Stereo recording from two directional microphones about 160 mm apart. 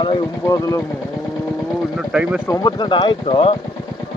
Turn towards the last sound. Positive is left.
turn(degrees=35)  # may be behind; listen again after turning